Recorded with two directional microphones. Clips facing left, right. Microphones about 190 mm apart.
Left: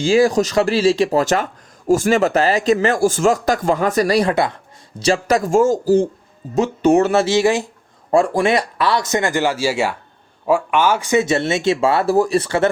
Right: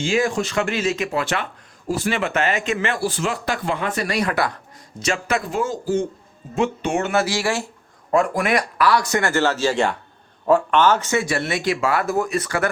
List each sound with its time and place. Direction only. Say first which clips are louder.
0.0 s speech: left 7 dB; 35° left (ahead or behind); by 7.7 s 20° left (ahead or behind)
8.1 s speech: left 4 dB; 30° left (ahead or behind)